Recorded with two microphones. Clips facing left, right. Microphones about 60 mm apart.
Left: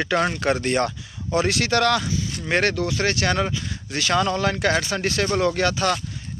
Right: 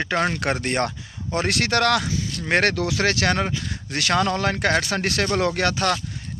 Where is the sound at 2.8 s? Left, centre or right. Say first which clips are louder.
Right 1 dB; right.